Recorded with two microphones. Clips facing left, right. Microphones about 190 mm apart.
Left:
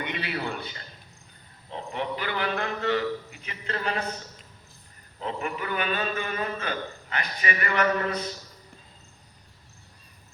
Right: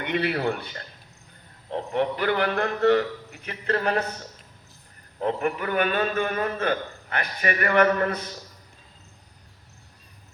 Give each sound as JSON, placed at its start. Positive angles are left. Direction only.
{"t": 0.0, "sound": "a man's voice", "side_deg": -60}
{"t": 5.2, "sound": "a man's voice", "side_deg": -55}